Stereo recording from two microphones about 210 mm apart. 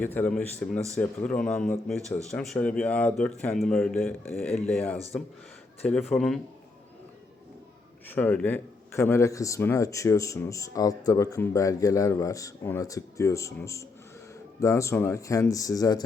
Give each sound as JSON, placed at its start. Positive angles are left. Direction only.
{"t": 0.0, "sound": "a man's voice", "side_deg": 10}
{"t": 8.0, "sound": "a man's voice", "side_deg": 10}